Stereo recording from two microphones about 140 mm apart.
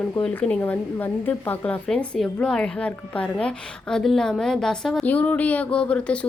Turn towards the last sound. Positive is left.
turn(degrees=10)  # may be behind; listen again after turning